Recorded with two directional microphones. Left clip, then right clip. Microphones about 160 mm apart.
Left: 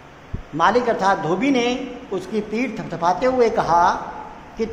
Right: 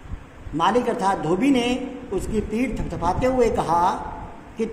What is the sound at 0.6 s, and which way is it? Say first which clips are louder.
A man's voice: left 3 dB; 15° right (ahead or behind).